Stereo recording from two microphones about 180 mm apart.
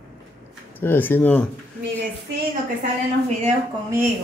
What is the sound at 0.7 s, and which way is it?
Speech, 10° left (ahead or behind).